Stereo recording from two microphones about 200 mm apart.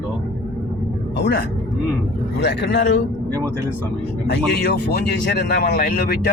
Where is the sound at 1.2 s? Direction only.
55° left (ahead or behind).